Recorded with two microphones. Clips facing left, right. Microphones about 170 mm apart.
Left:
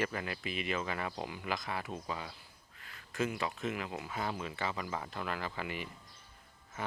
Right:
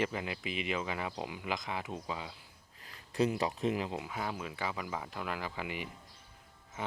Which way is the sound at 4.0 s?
10° right (ahead or behind).